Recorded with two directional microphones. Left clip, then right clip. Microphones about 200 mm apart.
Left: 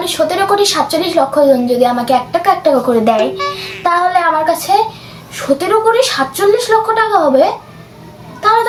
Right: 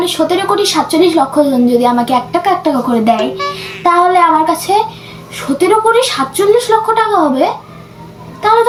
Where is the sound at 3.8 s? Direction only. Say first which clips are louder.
Right 3 dB; 20° left (ahead or behind).